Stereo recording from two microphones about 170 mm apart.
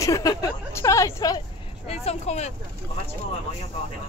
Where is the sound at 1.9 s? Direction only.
40° left (ahead or behind).